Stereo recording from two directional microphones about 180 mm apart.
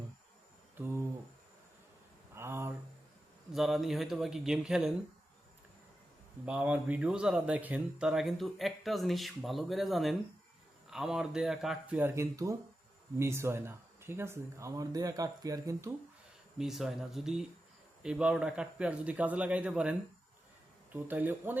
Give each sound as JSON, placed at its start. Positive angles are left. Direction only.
{"t": 0.8, "sound": "speech", "side_deg": -10}
{"t": 2.3, "sound": "a sound", "side_deg": -15}
{"t": 3.5, "sound": "speech", "side_deg": 0}
{"t": 6.4, "sound": "speech", "side_deg": -5}
{"t": 16.6, "sound": "speech", "side_deg": 0}